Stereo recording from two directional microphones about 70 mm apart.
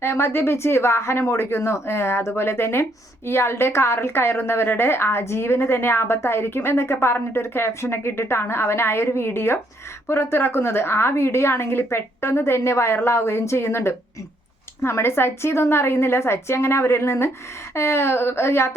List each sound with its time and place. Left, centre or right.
0.0 s a woman's voice: left